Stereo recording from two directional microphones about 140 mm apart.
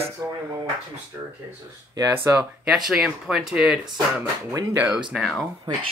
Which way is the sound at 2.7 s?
5° right (ahead or behind).